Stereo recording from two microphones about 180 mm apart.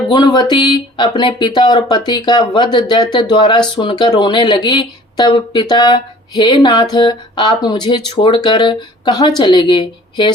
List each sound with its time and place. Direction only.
0.1 s speech: 25° left (ahead or behind)